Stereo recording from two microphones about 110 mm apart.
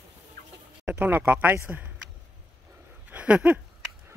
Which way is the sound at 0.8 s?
15° right (ahead or behind).